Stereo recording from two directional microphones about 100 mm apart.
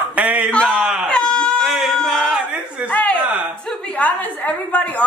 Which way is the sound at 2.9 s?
15° left (ahead or behind).